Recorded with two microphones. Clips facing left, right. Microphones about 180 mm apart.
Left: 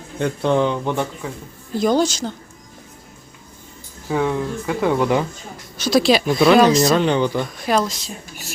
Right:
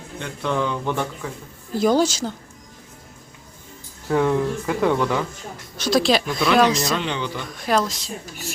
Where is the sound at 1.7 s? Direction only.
5° right (ahead or behind).